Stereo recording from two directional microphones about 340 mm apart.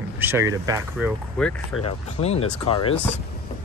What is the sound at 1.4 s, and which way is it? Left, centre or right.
Speech, centre.